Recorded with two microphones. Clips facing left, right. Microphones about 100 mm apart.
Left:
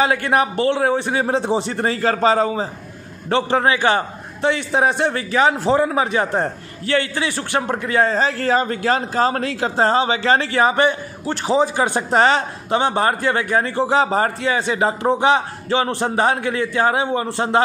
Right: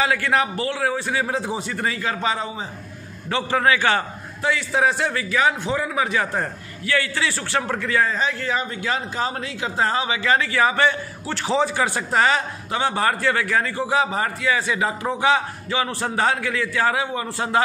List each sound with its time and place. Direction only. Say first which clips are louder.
0.0 s a man's voice: left 3 dB; 20° left (ahead or behind); by 2.7 s 45° left (ahead or behind)
3.3 s a man's voice: left 3 dB; 30° left (ahead or behind)